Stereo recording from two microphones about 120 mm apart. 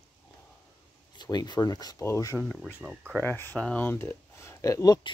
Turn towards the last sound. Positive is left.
turn(degrees=25)  # may be behind; listen again after turning